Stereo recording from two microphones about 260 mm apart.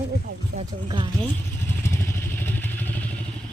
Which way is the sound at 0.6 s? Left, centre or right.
Centre.